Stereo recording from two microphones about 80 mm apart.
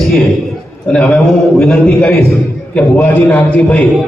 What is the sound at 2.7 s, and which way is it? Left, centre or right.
A man's voice, centre.